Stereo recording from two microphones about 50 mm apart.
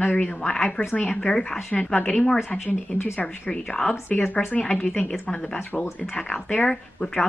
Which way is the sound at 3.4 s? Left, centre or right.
Centre.